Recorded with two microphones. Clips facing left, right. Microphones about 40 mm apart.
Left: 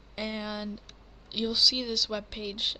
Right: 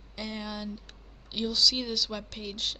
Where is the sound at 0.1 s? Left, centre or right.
Left.